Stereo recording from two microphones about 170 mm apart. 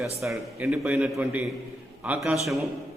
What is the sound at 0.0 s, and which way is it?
A man's voice, centre (ahead or behind).